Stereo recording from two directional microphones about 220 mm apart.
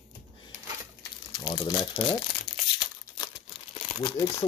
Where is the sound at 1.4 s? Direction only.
20° left (ahead or behind).